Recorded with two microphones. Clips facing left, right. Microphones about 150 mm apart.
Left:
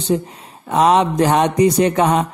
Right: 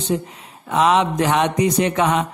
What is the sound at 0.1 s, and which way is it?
Mantra, 35° left (ahead or behind).